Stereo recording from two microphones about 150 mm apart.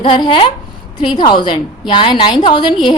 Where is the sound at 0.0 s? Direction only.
35° left (ahead or behind).